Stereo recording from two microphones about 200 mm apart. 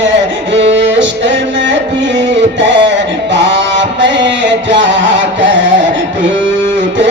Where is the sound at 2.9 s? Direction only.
65° right (ahead or behind).